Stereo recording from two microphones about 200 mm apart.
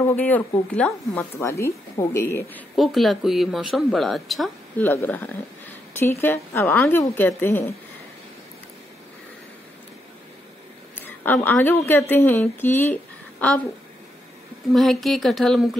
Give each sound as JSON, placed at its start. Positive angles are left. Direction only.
{"t": 0.1, "sound": "a woman's voice", "side_deg": 10}
{"t": 2.7, "sound": "a woman's voice", "side_deg": 0}
{"t": 11.0, "sound": "a woman's voice", "side_deg": 10}
{"t": 14.7, "sound": "speech", "side_deg": 0}